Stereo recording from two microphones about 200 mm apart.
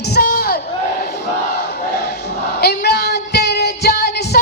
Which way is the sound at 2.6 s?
55° left (ahead or behind).